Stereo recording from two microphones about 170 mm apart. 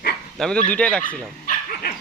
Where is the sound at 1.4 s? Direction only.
60° left (ahead or behind).